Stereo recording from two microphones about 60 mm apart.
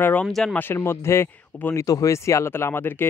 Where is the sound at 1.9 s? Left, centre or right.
Left.